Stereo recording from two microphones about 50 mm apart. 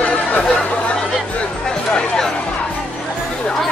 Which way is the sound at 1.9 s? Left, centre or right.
Centre.